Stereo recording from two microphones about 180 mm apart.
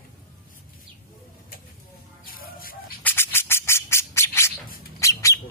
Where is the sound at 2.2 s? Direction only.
50° left (ahead or behind).